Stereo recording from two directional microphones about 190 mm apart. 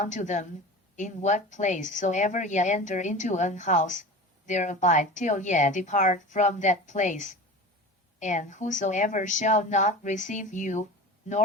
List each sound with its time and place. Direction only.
0.0 s a woman's voice: 40° left (ahead or behind)